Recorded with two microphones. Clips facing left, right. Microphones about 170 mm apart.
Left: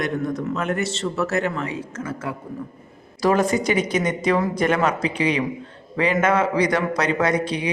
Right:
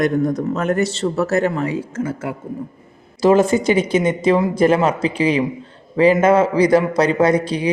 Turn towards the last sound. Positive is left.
turn(degrees=-30)  # may be behind; listen again after turning